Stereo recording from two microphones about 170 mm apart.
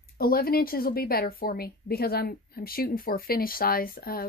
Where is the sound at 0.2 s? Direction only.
60° left (ahead or behind).